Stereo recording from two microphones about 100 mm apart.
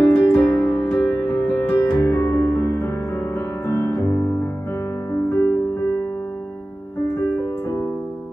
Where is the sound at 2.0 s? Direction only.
25° left (ahead or behind).